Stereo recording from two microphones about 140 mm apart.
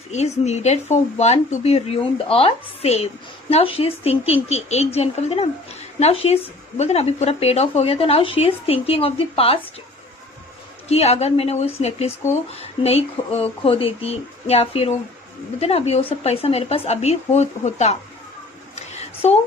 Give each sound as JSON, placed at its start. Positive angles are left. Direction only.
{"t": 0.1, "sound": "speech", "side_deg": 55}
{"t": 10.8, "sound": "speech", "side_deg": 50}
{"t": 18.8, "sound": "a sound", "side_deg": 55}